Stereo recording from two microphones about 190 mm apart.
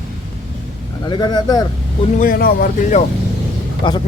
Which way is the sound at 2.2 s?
50° left (ahead or behind).